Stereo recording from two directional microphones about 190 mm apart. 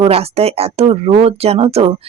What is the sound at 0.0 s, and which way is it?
Speech, 30° right (ahead or behind).